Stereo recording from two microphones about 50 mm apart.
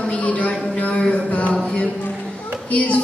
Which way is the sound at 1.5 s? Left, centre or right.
Left.